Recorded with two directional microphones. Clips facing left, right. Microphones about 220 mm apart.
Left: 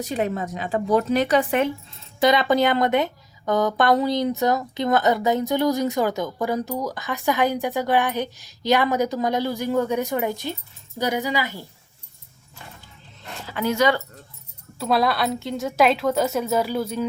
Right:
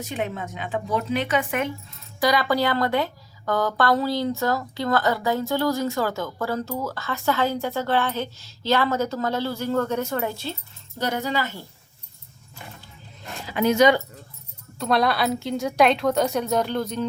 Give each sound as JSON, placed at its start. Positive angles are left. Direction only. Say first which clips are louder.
{"t": 0.0, "sound": "a woman's voice", "louder": "left 4 dB", "side_deg": 35}
{"t": 2.2, "sound": "a woman's voice", "louder": "left 3 dB", "side_deg": 20}
{"t": 13.4, "sound": "speech", "louder": "right 3 dB", "side_deg": -15}
{"t": 14.8, "sound": "a woman's voice", "louder": "even", "side_deg": 5}